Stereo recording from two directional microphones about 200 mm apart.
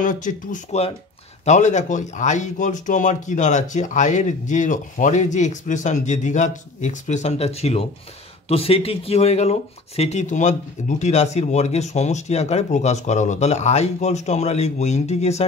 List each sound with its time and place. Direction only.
0.0 s speech: 40° left (ahead or behind)